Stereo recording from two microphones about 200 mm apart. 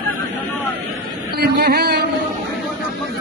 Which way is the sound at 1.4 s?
50° right (ahead or behind).